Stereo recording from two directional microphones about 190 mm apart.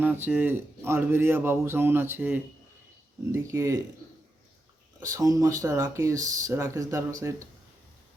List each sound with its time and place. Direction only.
0.0 s speech: 10° right (ahead or behind)
4.9 s speech: 15° right (ahead or behind)